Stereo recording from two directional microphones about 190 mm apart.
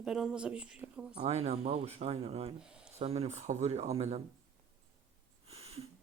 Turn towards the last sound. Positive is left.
turn(degrees=-30)  # may be behind; listen again after turning